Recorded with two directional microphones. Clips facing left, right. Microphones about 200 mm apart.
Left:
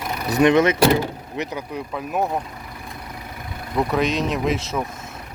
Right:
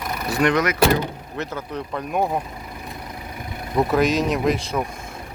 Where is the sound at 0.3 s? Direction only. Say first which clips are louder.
Left 4 dB; 20° left (ahead or behind).